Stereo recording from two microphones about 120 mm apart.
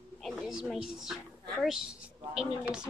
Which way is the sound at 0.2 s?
5° right (ahead or behind).